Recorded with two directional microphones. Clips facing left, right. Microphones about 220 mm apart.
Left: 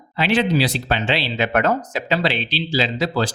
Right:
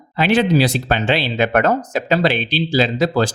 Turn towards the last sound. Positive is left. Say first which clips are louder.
# right 4 dB
turn(degrees=-50)  # may be behind; listen again after turning